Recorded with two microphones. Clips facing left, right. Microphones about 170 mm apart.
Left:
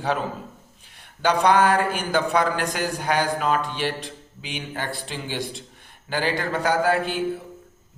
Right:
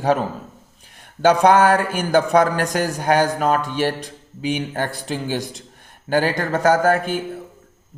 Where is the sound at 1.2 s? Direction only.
45° right (ahead or behind).